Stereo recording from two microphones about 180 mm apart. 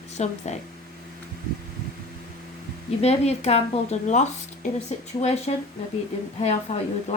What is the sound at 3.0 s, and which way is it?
Speech, 35° left (ahead or behind).